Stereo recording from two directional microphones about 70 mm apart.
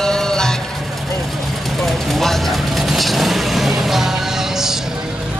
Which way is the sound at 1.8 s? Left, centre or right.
Centre.